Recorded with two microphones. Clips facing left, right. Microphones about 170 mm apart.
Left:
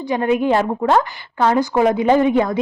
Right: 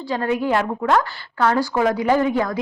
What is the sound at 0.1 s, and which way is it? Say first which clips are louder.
A woman's voice: left 4 dB; 20° left (ahead or behind).